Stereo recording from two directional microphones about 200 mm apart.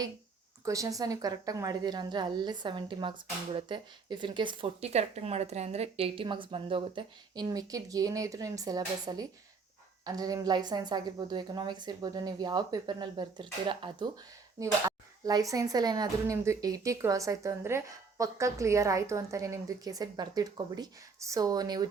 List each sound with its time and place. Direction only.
0.6 s a woman's voice: 15° right (ahead or behind)